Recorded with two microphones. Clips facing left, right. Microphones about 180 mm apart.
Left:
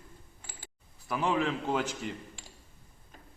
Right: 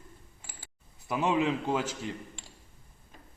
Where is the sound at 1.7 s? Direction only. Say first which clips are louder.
Right 1 dB; 5° right (ahead or behind).